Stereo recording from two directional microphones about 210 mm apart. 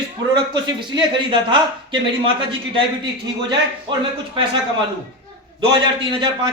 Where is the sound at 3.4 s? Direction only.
20° right (ahead or behind).